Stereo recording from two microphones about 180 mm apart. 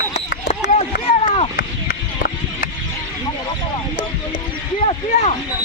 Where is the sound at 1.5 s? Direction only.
55° left (ahead or behind).